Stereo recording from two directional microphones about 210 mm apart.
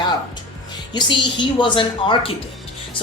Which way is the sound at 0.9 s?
20° left (ahead or behind).